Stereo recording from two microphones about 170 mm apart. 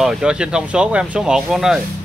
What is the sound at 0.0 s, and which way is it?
Speech, 5° right (ahead or behind).